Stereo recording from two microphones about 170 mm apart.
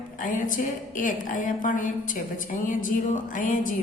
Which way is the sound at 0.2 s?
50° left (ahead or behind).